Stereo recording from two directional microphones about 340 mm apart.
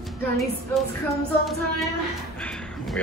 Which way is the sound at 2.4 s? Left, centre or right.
Centre.